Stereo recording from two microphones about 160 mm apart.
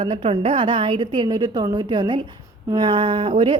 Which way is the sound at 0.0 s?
30° right (ahead or behind).